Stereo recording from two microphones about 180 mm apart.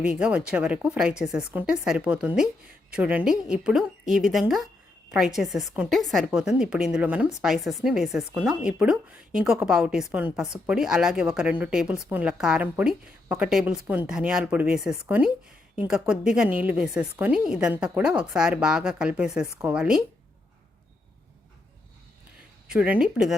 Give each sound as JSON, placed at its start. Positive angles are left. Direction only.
{"t": 0.0, "sound": "a woman's voice", "side_deg": -5}
{"t": 22.7, "sound": "a woman's voice", "side_deg": -5}